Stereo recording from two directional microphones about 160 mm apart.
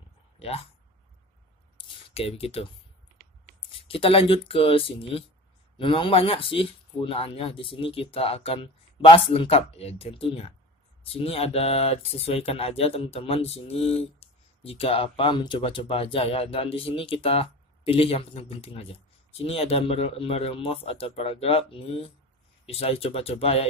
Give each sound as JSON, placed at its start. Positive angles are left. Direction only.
{"t": 0.4, "sound": "speech", "side_deg": 40}
{"t": 2.1, "sound": "speech", "side_deg": 40}
{"t": 3.7, "sound": "speech", "side_deg": 35}